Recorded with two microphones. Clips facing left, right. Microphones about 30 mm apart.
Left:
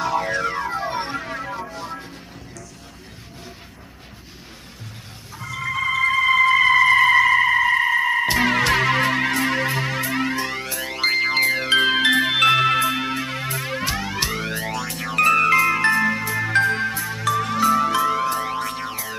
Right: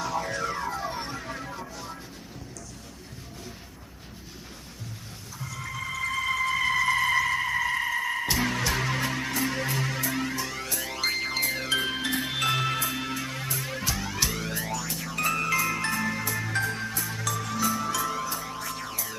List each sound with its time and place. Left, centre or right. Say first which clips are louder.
0.0 s music: left 7 dB; left
5.4 s music: left 11 dB; left
8.3 s music: left 9 dB; left
10.6 s music: left 6 dB; left
11.8 s music: left 11 dB; left
17.0 s music: left 8 dB; left
17.3 s music: left 11 dB; left
18.9 s music: left 6 dB; left